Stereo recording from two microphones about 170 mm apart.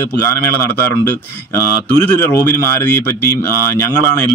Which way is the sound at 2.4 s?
15° left (ahead or behind).